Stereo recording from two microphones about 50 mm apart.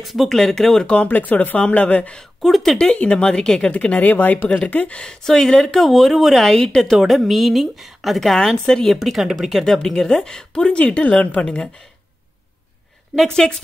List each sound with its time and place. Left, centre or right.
0.0 s a woman's voice: centre
1.0 s speech: left
2.4 s a woman's voice: centre
2.8 s speech: left
3.7 s speech: left
5.0 s speech: centre
7.0 s a woman's voice: centre
8.9 s a woman's voice: centre
9.7 s speech: centre
13.3 s speech: centre